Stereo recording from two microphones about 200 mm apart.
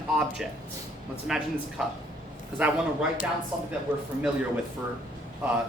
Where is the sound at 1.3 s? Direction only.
Centre (ahead or behind).